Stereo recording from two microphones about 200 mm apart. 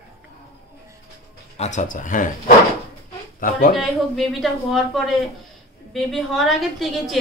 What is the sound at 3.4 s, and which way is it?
Speech, 45° left (ahead or behind).